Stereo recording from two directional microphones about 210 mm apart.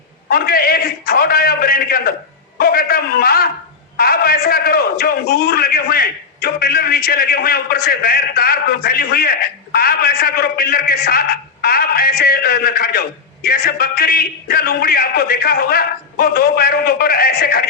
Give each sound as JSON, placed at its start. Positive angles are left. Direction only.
{"t": 0.3, "sound": "a man's voice", "side_deg": 45}